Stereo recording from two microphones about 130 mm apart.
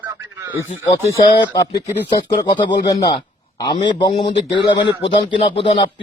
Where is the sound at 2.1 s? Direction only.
35° left (ahead or behind).